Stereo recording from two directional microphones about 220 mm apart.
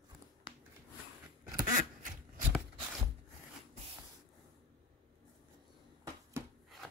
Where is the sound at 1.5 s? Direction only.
35° right (ahead or behind).